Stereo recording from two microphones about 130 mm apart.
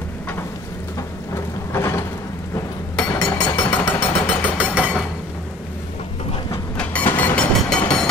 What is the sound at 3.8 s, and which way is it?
Jackhammer, 50° left (ahead or behind).